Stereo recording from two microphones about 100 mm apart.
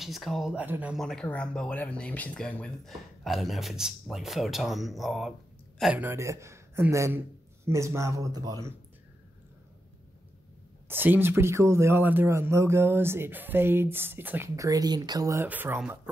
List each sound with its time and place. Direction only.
0.0 s speech: centre (ahead or behind)
0.6 s speech: 15° right (ahead or behind)
0.9 s speech: 5° left (ahead or behind)
5.9 s speech: 25° right (ahead or behind)
10.9 s speech: 20° right (ahead or behind)
14.5 s speech: 35° right (ahead or behind)
15.3 s speech: 20° right (ahead or behind)